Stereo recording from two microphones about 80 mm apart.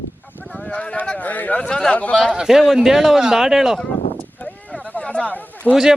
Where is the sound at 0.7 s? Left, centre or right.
Centre.